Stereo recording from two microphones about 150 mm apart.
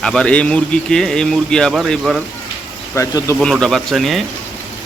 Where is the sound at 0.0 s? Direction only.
5° left (ahead or behind).